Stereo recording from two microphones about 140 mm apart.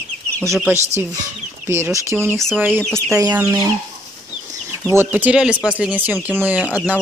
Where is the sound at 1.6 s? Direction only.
20° right (ahead or behind).